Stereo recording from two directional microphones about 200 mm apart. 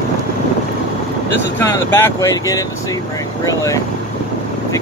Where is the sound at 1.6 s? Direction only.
10° left (ahead or behind).